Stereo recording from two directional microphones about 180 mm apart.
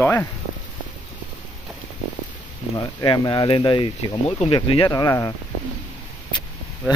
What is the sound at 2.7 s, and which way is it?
Speech, 25° left (ahead or behind).